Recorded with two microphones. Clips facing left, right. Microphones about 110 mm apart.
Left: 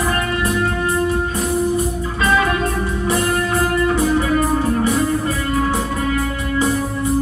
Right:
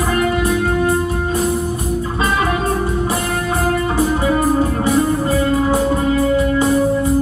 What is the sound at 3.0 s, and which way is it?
Music, 25° right (ahead or behind).